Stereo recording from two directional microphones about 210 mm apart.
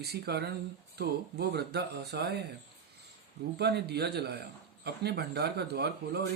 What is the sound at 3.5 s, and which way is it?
Speech, 50° right (ahead or behind).